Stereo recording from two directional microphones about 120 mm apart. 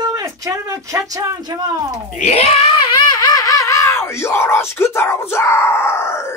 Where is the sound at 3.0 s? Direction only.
35° left (ahead or behind).